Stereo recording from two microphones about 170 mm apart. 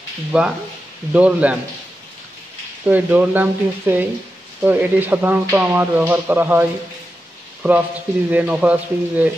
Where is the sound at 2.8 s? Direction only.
10° right (ahead or behind).